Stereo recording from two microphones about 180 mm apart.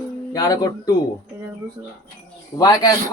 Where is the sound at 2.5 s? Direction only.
20° left (ahead or behind).